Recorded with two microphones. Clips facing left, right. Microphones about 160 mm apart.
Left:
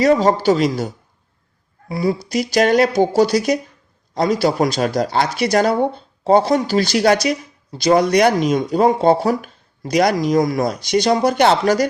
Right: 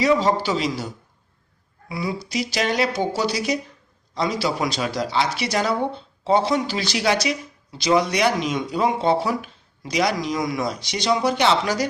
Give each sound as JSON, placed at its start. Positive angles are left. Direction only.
{"t": 0.0, "sound": "speech", "side_deg": 45}
{"t": 1.9, "sound": "a woman's voice", "side_deg": 40}